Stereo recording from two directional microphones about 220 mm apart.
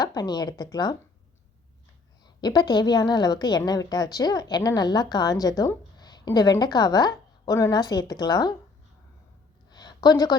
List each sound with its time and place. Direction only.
0.0 s speech: 15° left (ahead or behind)
2.2 s a woman's voice: 20° left (ahead or behind)
9.6 s a sound: 20° left (ahead or behind)